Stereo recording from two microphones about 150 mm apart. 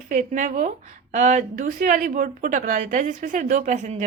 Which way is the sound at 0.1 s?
60° right (ahead or behind).